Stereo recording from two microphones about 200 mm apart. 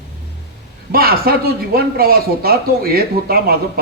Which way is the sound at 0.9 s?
50° right (ahead or behind).